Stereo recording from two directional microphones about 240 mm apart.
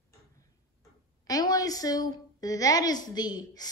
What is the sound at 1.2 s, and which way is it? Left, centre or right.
A woman's voice, centre.